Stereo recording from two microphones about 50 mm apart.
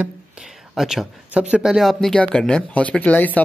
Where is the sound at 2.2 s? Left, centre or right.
Left.